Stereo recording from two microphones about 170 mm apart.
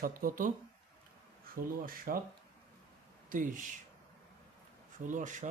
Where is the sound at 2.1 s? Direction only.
55° right (ahead or behind).